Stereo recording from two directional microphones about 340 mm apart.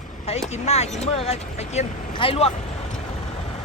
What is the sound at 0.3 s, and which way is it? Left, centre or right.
Speech, centre.